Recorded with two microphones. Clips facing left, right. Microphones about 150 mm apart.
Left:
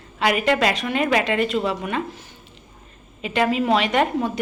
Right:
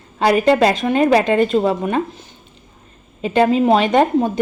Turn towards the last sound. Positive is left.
turn(degrees=-30)  # may be behind; listen again after turning